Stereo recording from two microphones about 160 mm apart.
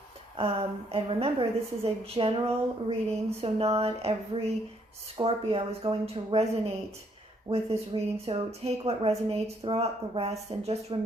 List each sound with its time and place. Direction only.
0.3 s speech: 35° right (ahead or behind)